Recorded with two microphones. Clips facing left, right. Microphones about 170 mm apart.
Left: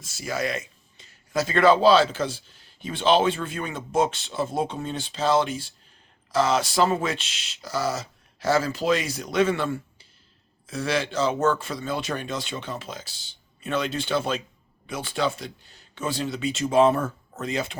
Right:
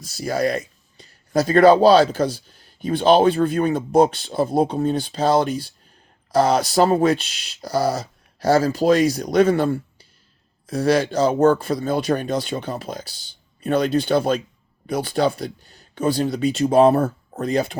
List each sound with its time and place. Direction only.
0.0 s speech: 35° right (ahead or behind)